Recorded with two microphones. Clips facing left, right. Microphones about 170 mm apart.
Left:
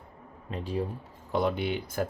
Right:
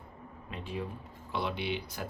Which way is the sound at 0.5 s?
35° left (ahead or behind).